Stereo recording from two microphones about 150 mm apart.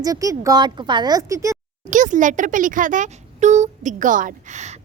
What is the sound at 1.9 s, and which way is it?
A child's voice, 55° right (ahead or behind).